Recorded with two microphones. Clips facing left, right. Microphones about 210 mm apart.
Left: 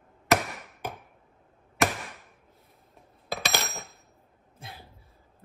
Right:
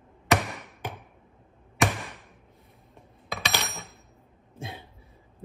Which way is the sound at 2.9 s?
Centre (ahead or behind).